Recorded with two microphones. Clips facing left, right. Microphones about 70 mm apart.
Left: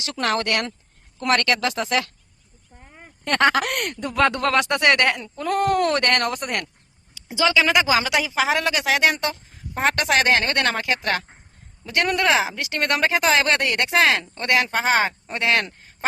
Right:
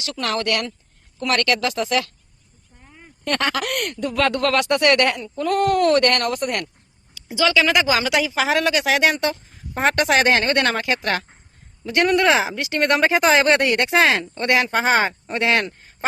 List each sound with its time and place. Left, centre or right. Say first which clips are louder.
0.0 s speech: left 1 dB; left
0.3 s speech: even; left
7.5 s speech: even; centre